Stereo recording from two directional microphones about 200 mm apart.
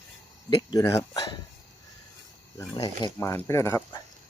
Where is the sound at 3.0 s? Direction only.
15° left (ahead or behind).